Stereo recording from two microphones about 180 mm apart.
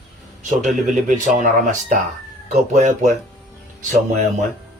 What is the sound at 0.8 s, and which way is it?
Speech, 45° right (ahead or behind).